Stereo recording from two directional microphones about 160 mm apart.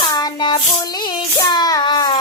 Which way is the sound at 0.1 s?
30° left (ahead or behind).